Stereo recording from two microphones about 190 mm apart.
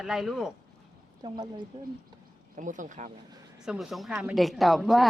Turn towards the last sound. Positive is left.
turn(degrees=0)  # may be behind; listen again after turning